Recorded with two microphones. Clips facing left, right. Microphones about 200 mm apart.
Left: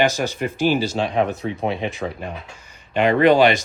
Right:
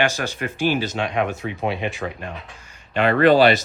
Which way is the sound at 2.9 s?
15° left (ahead or behind).